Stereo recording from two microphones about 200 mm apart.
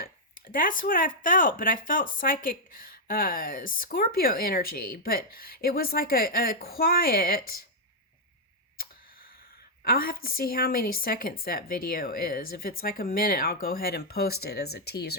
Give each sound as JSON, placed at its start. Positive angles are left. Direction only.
{"t": 0.0, "sound": "speech", "side_deg": 45}
{"t": 9.8, "sound": "speech", "side_deg": 50}